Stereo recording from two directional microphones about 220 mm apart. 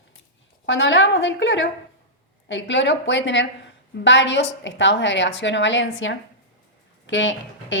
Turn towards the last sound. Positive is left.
turn(degrees=60)  # may be behind; listen again after turning